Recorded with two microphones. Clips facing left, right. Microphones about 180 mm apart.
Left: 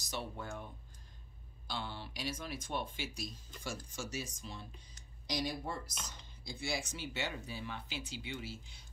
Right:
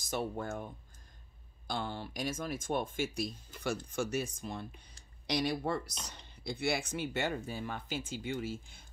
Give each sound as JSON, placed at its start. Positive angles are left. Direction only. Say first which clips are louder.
{"t": 0.0, "sound": "speech", "louder": "right 7 dB", "side_deg": -50}
{"t": 1.7, "sound": "speech", "louder": "right 5 dB", "side_deg": -50}